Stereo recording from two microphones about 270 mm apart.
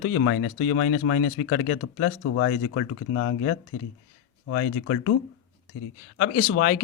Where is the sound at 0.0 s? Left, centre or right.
Left.